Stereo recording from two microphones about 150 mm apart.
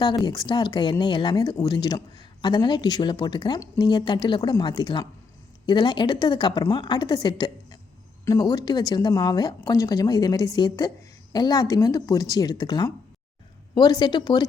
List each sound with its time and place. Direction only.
0.0 s a woman's voice: 30° left (ahead or behind)